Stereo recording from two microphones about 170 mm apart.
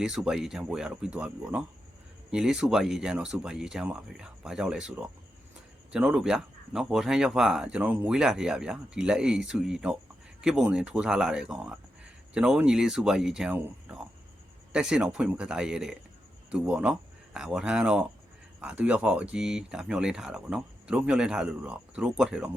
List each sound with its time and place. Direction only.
0.0 s speech: 5° right (ahead or behind)